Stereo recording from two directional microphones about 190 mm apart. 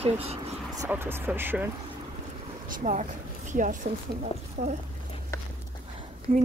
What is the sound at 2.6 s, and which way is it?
Speech, 40° right (ahead or behind).